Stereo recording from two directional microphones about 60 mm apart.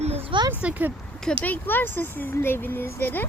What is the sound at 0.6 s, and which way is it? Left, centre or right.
Speech, right.